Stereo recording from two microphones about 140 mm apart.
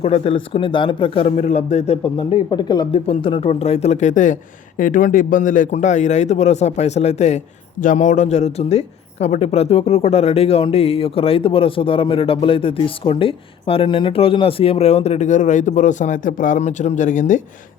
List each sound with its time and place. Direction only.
0.0 s speech: 45° left (ahead or behind)
2.1 s speech: 35° left (ahead or behind)
2.9 s a man's voice: 40° left (ahead or behind); by 17.4 s 65° left (ahead or behind)